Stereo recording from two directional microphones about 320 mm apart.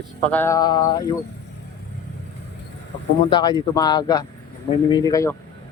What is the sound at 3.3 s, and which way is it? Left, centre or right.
Speech, centre.